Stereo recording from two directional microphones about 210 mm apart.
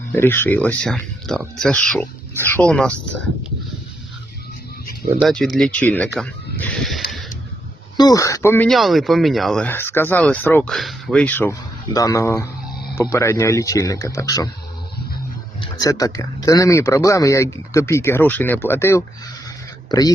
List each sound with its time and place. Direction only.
0.1 s speech: 10° left (ahead or behind)
5.2 s speech: 5° left (ahead or behind)
7.9 s speech: 15° left (ahead or behind)
15.6 s speech: 15° left (ahead or behind)